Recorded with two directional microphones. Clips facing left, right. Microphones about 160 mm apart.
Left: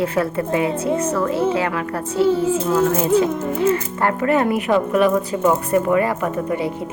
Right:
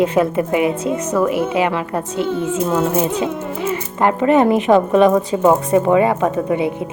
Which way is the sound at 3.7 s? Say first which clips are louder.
Right 2 dB; 20° right (ahead or behind).